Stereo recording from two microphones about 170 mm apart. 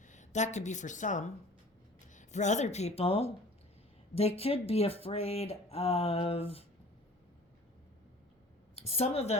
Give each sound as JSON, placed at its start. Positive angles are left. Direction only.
{"t": 0.0, "sound": "speech", "side_deg": 45}
{"t": 8.7, "sound": "a woman's voice", "side_deg": 35}